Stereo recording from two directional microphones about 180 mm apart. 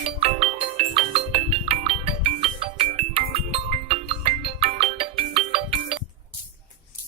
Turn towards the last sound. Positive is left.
turn(degrees=-30)  # may be behind; listen again after turning